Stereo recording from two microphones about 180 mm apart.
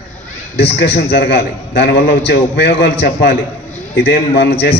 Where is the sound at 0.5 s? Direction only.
65° left (ahead or behind).